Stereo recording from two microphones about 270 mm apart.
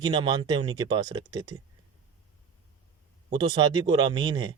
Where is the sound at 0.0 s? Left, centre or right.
Centre.